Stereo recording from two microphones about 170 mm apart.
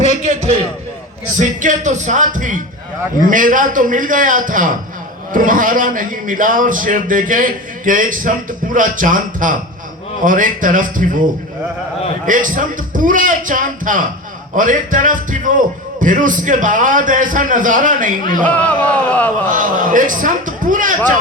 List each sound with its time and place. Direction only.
1.4 s a man's voice: 50° right (ahead or behind)
12.2 s a man's voice: 50° right (ahead or behind)
18.4 s speech: 10° left (ahead or behind)
19.5 s a man's voice: 50° right (ahead or behind)